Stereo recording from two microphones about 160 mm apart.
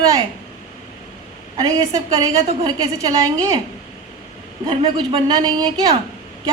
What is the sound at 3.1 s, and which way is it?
Speech, 25° right (ahead or behind).